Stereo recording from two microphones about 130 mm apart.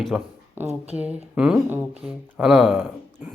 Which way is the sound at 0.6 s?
55° right (ahead or behind).